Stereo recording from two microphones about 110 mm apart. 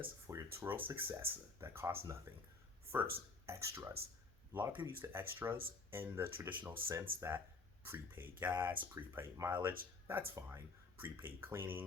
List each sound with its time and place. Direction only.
0.0 s speech: 25° right (ahead or behind)